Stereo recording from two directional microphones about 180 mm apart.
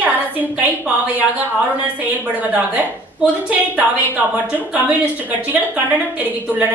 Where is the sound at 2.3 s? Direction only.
10° right (ahead or behind).